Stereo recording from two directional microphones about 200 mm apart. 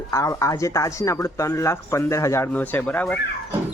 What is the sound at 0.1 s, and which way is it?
Speech, 15° left (ahead or behind).